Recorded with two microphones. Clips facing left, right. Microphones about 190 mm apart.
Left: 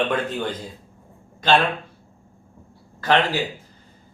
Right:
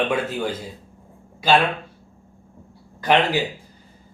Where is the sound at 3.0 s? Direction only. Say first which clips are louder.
Right 1 dB; 15° right (ahead or behind).